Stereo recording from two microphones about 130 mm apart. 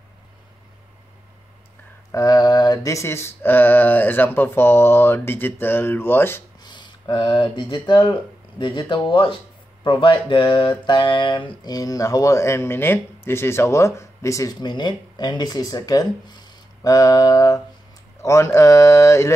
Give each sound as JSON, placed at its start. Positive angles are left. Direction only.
{"t": 2.1, "sound": "a sound", "side_deg": 25}
{"t": 6.6, "sound": "speech", "side_deg": 35}
{"t": 9.8, "sound": "mantra", "side_deg": 40}